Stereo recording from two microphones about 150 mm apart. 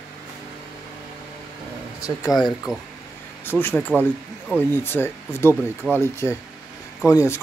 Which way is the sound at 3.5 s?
15° left (ahead or behind).